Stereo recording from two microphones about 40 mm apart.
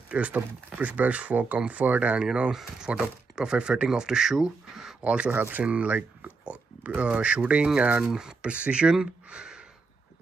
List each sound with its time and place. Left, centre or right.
0.1 s speech: right
2.5 s speech: centre
5.0 s speech: right
8.5 s speech: right
8.9 s a sound: centre